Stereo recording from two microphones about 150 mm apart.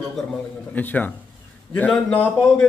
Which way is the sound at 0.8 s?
10° left (ahead or behind).